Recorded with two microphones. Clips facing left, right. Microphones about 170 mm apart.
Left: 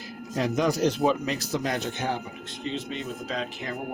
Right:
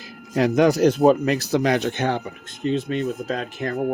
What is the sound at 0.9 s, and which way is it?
Speech, 50° right (ahead or behind).